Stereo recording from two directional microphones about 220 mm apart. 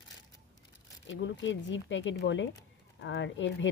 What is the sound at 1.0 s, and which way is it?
Speech, 55° left (ahead or behind).